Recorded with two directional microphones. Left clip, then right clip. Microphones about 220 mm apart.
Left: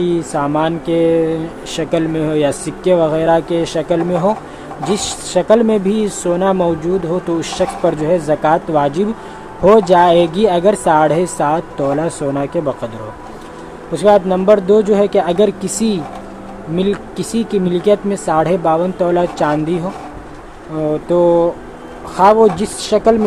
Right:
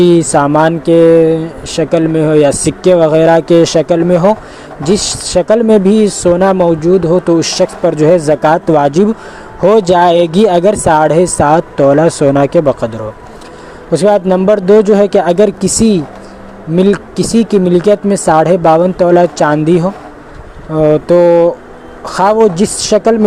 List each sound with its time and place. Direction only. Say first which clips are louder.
0.0 s speech: right 9 dB; 35° right (ahead or behind)
13.9 s speech: right 3 dB; 30° right (ahead or behind)